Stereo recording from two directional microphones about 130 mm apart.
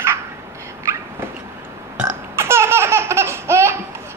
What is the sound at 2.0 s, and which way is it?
Laughter, 20° right (ahead or behind).